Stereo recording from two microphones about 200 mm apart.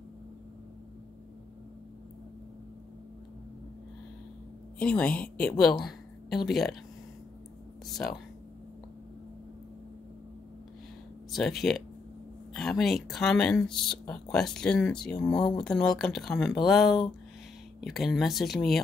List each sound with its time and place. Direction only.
4.7 s a woman's voice: 5° left (ahead or behind)
11.3 s speech: centre (ahead or behind)
15.3 s speech: 20° left (ahead or behind)
15.6 s speech: 5° left (ahead or behind)